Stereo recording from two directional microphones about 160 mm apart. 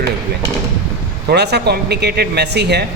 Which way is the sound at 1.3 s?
90° right.